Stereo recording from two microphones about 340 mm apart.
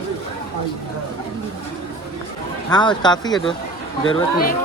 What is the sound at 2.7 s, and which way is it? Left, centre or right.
Speech, centre.